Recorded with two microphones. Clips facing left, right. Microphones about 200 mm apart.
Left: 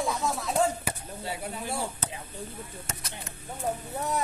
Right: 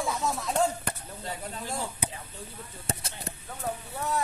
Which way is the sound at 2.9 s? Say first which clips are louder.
Right 10 dB; 35° right (ahead or behind).